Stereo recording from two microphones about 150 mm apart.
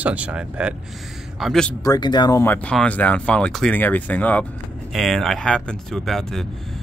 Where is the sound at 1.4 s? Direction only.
5° left (ahead or behind).